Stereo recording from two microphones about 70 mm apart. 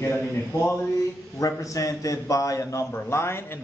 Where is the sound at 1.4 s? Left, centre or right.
Left.